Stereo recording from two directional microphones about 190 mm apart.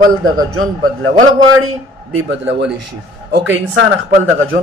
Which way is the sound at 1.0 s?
90° right.